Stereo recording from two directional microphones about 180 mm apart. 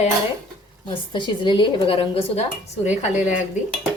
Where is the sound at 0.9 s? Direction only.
25° left (ahead or behind); by 3.4 s 40° left (ahead or behind).